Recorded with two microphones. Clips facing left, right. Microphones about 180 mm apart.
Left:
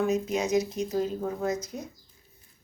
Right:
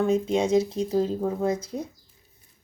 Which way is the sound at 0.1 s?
30° right (ahead or behind).